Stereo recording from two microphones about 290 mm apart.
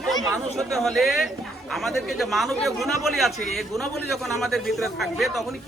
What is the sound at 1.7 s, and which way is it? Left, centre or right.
Speech, centre.